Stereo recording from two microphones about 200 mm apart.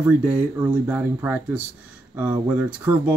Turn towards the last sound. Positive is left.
turn(degrees=-10)  # may be behind; listen again after turning